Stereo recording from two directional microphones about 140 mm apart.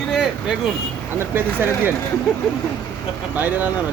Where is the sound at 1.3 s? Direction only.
15° right (ahead or behind).